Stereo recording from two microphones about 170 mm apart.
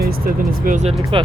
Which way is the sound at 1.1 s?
30° right (ahead or behind).